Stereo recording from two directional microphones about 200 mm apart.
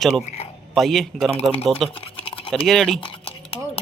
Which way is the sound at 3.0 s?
25° left (ahead or behind).